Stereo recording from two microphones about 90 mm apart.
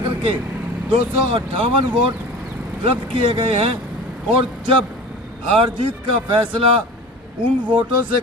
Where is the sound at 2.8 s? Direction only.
80° right.